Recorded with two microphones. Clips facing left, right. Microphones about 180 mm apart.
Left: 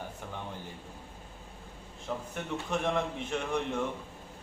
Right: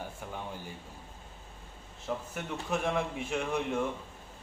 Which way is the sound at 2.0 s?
5° right (ahead or behind).